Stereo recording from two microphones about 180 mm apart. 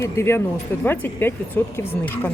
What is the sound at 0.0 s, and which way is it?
A woman's voice, 15° left (ahead or behind).